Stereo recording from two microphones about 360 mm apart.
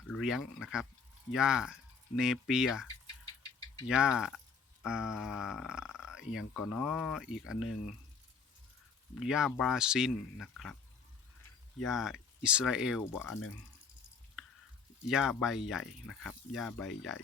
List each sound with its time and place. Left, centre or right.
0.1 s speech: centre
3.8 s speech: centre
4.8 s a sound: centre
6.7 s speech: centre
7.5 s speech: left
9.1 s speech: centre
11.9 s speech: centre
15.0 s speech: centre